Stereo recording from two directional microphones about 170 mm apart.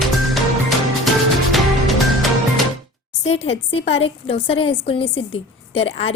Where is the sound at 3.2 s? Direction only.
40° left (ahead or behind).